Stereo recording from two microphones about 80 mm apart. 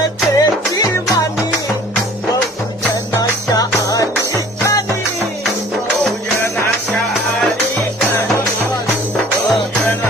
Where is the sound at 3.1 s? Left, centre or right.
Left.